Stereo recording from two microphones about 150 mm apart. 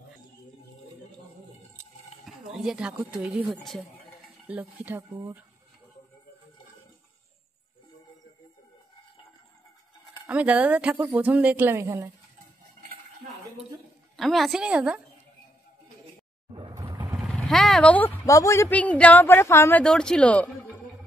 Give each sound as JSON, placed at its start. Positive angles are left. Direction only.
{"t": 2.2, "sound": "a sound", "side_deg": -5}
{"t": 3.1, "sound": "a woman's voice", "side_deg": -5}
{"t": 4.5, "sound": "speech", "side_deg": -10}
{"t": 10.2, "sound": "speech", "side_deg": -10}
{"t": 14.1, "sound": "a woman's voice", "side_deg": 0}
{"t": 16.5, "sound": "music", "side_deg": -30}
{"t": 17.2, "sound": "speech", "side_deg": 0}
{"t": 19.8, "sound": "speech", "side_deg": 5}